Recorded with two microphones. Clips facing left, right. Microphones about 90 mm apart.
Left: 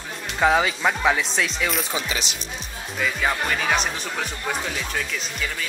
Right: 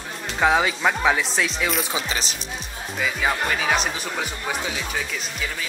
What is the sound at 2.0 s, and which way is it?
Speech, 40° right (ahead or behind).